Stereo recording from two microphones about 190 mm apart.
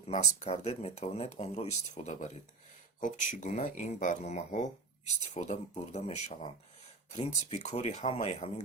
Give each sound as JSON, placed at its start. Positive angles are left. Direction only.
{"t": 0.1, "sound": "speech", "side_deg": 40}